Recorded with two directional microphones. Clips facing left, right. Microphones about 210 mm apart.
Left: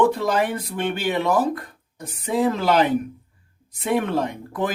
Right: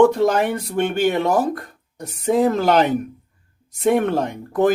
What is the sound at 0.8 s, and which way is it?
Speech, 45° right (ahead or behind).